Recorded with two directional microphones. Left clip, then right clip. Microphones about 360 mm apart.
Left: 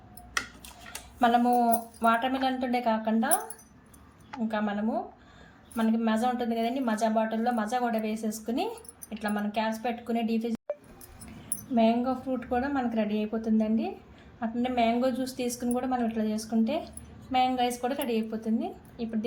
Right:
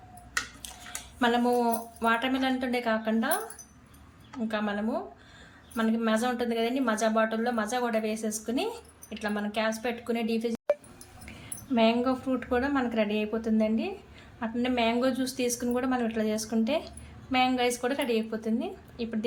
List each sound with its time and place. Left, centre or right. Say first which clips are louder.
1.2 s a woman's voice: left 2 dB; centre
4.4 s a woman's voice: even; centre
11.7 s a woman's voice: right 1 dB; centre